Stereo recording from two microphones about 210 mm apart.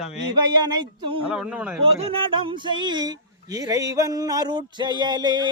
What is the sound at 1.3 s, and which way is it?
Speech, 5° right (ahead or behind).